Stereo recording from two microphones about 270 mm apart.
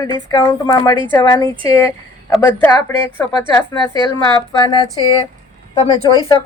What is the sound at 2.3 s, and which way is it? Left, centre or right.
Speech, centre.